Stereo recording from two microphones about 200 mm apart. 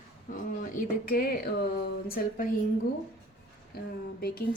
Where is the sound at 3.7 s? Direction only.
50° left (ahead or behind).